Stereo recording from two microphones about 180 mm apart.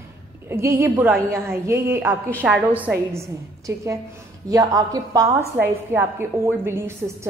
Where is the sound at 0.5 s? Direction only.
15° right (ahead or behind).